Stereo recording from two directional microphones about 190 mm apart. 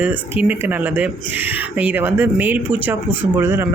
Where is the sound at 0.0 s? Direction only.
10° right (ahead or behind).